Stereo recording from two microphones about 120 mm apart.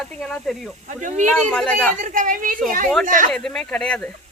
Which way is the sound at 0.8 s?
90° right.